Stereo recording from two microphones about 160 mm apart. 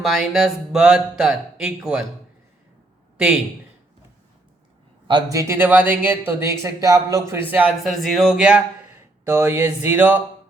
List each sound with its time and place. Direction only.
0.0 s speech: centre (ahead or behind)
3.2 s a man's voice: 5° right (ahead or behind)
5.0 s speech: 25° right (ahead or behind)
7.5 s speech: 10° right (ahead or behind)